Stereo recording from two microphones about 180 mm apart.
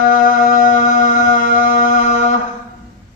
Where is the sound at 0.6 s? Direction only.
45° left (ahead or behind).